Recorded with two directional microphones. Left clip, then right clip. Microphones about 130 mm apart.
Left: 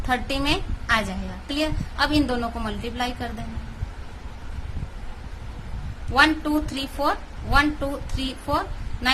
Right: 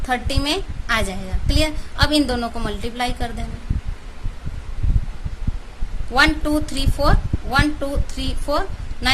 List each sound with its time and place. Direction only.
0.1 s a woman's voice: 20° right (ahead or behind)
6.1 s a woman's voice: 25° right (ahead or behind)